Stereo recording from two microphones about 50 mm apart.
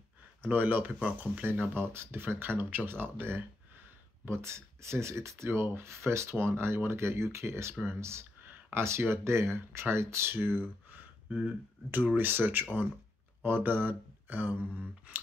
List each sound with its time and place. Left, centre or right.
0.4 s speech: right
1.5 s speech: right
4.3 s speech: right
6.3 s speech: right
11.2 s speech: right
12.2 s speech: right